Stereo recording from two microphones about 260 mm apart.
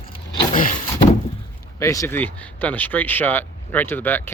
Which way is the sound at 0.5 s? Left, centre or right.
Left.